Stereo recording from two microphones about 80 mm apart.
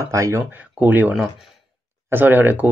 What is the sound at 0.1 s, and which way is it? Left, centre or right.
Speech, right.